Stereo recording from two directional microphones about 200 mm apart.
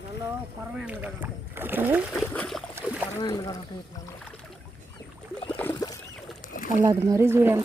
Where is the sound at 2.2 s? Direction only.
5° left (ahead or behind).